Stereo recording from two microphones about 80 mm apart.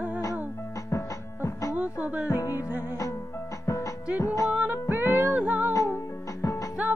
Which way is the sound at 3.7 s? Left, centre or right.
Left.